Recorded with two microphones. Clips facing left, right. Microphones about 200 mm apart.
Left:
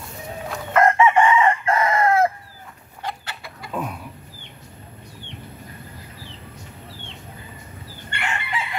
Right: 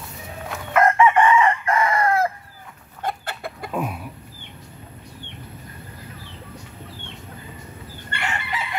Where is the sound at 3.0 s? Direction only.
50° right (ahead or behind).